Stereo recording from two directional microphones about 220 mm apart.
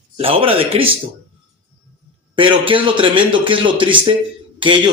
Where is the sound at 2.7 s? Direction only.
25° right (ahead or behind).